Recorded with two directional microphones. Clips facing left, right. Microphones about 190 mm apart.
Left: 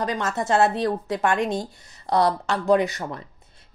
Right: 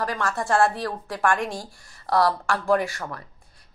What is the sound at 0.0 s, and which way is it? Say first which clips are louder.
Speech: left 2 dB; 20° left (ahead or behind).